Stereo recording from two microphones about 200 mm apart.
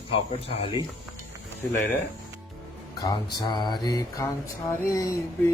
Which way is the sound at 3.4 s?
20° left (ahead or behind).